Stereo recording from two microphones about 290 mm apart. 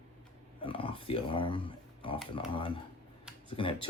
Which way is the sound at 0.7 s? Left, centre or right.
Centre.